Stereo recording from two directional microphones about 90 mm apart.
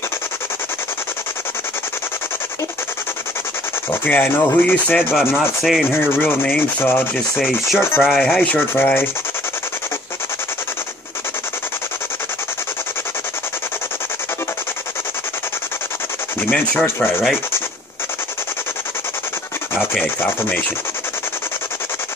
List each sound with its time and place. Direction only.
4.0 s rub: 20° left (ahead or behind)
5.1 s rub: centre (ahead or behind)
5.9 s rub: 25° left (ahead or behind)
7.3 s rub: 5° right (ahead or behind); by 9.1 s 25° left (ahead or behind)
16.4 s rub: 10° left (ahead or behind)
20.2 s rub: 20° left (ahead or behind)